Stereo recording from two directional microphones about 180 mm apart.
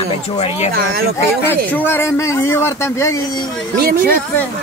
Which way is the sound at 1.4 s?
10° left (ahead or behind).